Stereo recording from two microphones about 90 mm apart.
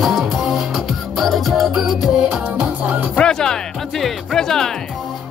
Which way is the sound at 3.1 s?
10° left (ahead or behind).